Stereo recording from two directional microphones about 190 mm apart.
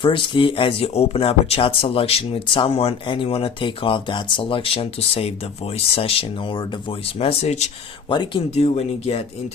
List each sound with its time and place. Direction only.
0.0 s speech: 25° left (ahead or behind)
8.1 s speech: 25° left (ahead or behind)